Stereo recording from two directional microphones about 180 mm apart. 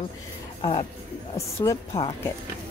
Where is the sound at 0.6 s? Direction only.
30° left (ahead or behind).